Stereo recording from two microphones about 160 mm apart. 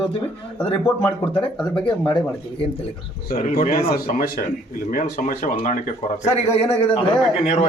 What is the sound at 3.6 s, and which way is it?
A man's voice, 70° left (ahead or behind).